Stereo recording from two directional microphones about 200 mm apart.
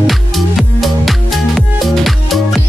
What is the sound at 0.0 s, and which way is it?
Music, centre (ahead or behind).